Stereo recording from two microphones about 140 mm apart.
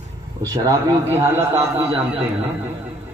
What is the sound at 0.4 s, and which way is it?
Speech, 25° right (ahead or behind).